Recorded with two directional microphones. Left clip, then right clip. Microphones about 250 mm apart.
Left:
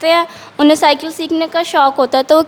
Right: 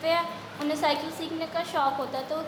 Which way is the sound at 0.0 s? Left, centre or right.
Left.